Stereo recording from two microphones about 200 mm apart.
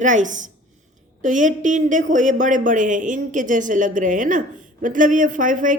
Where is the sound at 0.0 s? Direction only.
40° right (ahead or behind).